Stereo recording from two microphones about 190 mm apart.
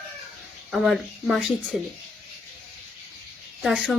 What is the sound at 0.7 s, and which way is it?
Speech, centre (ahead or behind).